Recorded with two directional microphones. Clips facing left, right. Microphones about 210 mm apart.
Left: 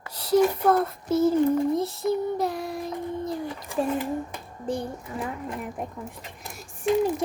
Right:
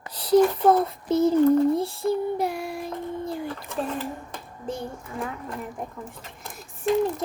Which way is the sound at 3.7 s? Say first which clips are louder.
Left 6 dB; 10° left (ahead or behind).